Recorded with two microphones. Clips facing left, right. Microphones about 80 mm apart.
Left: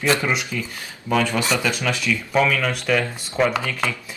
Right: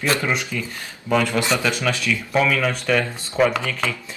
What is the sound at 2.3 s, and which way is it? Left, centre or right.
Speech, centre.